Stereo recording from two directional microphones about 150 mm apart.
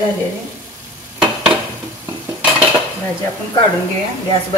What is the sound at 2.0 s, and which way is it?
Stir, 15° right (ahead or behind).